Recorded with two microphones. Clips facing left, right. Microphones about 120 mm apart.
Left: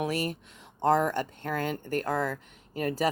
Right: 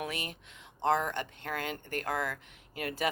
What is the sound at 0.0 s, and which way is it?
A woman's voice, 40° left (ahead or behind).